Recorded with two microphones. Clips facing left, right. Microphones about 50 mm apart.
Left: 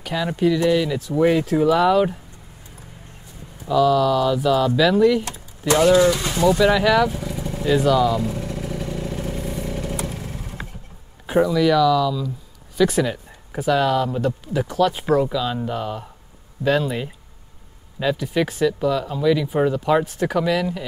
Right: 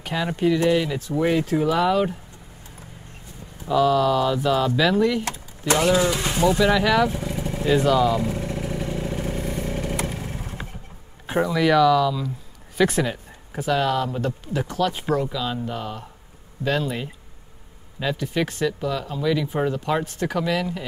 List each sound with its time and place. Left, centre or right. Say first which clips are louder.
0.0 s speech: left 2 dB; centre
0.9 s speech: left 4 dB; centre
3.6 s speech: left 2 dB; centre
6.0 s speech: left 4 dB; right
6.6 s speech: left 2 dB; centre
7.4 s vehicle: left 2 dB; centre
7.7 s speech: left 1 dB; centre
8.2 s vehicle: even; right
10.0 s motorcycle: even; right
11.4 s speech: right 1 dB; right
12.9 s speech: left 3 dB; centre